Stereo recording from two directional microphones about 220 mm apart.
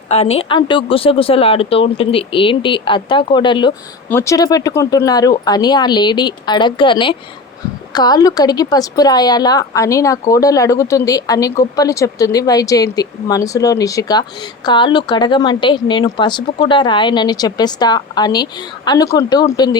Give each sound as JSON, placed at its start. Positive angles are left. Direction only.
{"t": 0.1, "sound": "a woman's voice", "side_deg": 30}